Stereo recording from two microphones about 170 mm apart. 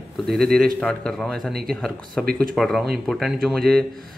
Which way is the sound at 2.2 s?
60° right (ahead or behind).